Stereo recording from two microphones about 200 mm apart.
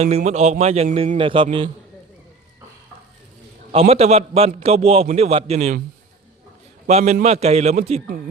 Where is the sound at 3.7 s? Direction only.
30° right (ahead or behind).